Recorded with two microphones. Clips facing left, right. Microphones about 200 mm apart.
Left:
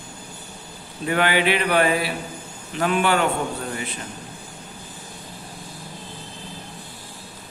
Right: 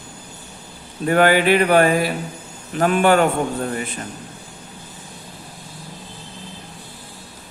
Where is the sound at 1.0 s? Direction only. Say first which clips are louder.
Right 5 dB; 45° right (ahead or behind).